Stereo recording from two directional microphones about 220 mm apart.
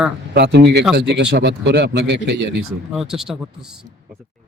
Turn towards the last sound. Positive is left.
turn(degrees=-5)  # may be behind; listen again after turning